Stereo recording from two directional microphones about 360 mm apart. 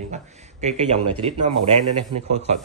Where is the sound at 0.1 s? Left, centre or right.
Centre.